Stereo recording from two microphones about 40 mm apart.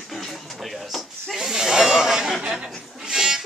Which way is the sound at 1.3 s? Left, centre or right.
Centre.